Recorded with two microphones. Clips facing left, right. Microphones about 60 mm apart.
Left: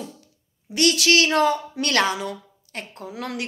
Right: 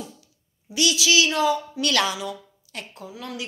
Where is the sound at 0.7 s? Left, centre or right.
Left.